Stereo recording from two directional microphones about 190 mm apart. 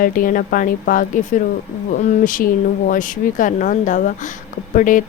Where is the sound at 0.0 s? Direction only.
45° left (ahead or behind).